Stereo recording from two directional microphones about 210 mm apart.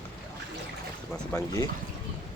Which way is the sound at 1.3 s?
15° left (ahead or behind).